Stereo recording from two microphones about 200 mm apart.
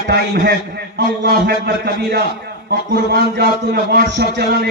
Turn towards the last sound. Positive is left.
turn(degrees=-50)  # may be behind; listen again after turning